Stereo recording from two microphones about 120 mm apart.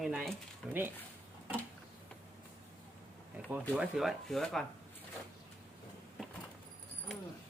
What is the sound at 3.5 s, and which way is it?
Speech, 10° right (ahead or behind).